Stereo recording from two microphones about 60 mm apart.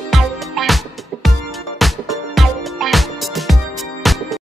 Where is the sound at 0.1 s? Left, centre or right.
Centre.